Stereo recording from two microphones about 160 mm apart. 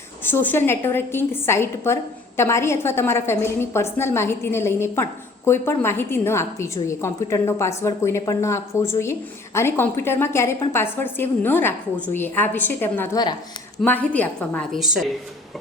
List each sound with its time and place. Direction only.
0.3 s a woman's voice: 15° left (ahead or behind)